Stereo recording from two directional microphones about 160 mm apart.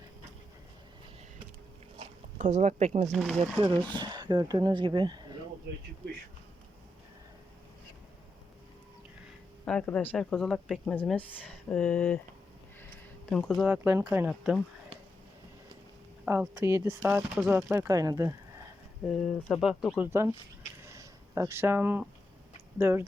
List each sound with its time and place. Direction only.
2.0 s zipper: 50° right (ahead or behind)
3.1 s speech: centre (ahead or behind)
3.9 s speech: 25° right (ahead or behind)
9.6 s speech: 5° left (ahead or behind)
13.3 s speech: 5° left (ahead or behind)
13.7 s speech: 10° right (ahead or behind)
16.2 s speech: 10° right (ahead or behind)
19.0 s speech: centre (ahead or behind)
20.1 s speech: 15° right (ahead or behind)
20.8 s a sound: 20° right (ahead or behind)
22.8 s speech: 15° right (ahead or behind)